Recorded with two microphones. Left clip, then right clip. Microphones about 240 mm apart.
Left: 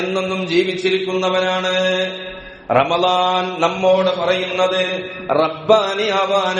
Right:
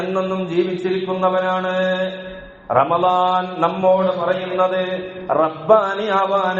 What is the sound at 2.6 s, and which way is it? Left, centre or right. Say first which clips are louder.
Mantra: left 1 dB; left.